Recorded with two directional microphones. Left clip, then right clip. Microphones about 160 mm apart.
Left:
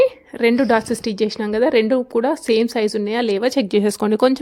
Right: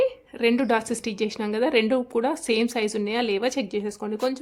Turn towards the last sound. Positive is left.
turn(degrees=65)  # may be behind; listen again after turning